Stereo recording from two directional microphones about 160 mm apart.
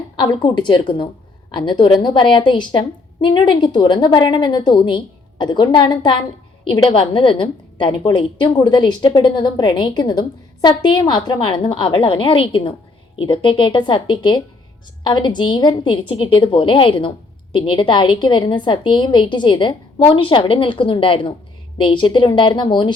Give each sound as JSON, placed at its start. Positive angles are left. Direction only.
{"t": 0.2, "sound": "a woman's voice", "side_deg": 30}